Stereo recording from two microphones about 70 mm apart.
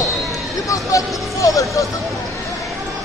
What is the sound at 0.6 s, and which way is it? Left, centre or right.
Speech, left.